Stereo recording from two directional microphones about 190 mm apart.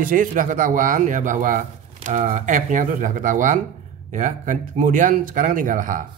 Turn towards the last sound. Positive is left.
turn(degrees=-45)  # may be behind; listen again after turning